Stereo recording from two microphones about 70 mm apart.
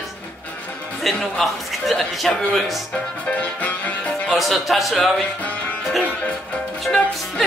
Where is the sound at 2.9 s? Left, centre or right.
Centre.